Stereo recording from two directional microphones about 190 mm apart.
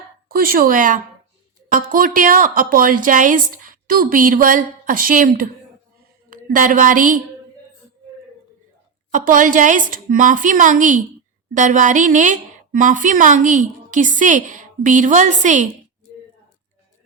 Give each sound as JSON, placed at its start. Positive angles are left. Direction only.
{"t": 0.3, "sound": "a woman's voice", "side_deg": -50}
{"t": 9.1, "sound": "a woman's voice", "side_deg": -45}